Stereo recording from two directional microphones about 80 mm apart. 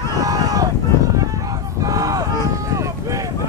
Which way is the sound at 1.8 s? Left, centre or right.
Right.